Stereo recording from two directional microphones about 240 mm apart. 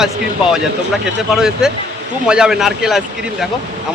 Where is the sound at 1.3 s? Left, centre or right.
Centre.